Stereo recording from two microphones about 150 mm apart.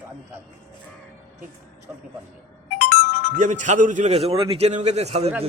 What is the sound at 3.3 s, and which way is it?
A man's voice, 60° right (ahead or behind).